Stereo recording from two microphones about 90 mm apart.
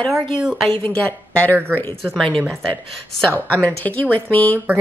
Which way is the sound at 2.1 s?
5° left (ahead or behind).